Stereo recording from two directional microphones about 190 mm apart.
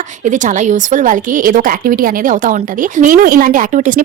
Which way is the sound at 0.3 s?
40° right (ahead or behind).